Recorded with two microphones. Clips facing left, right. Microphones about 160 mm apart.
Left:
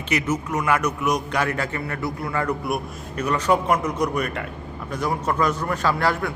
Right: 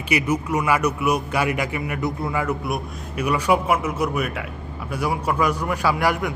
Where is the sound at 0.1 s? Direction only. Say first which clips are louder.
Right 2 dB; 10° right (ahead or behind).